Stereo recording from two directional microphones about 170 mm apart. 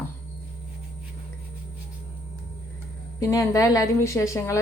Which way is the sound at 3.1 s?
20° left (ahead or behind).